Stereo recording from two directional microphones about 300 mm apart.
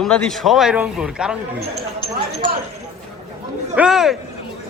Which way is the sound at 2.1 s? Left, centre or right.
Right.